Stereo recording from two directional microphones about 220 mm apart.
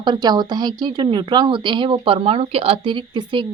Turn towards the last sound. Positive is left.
turn(degrees=-20)  # may be behind; listen again after turning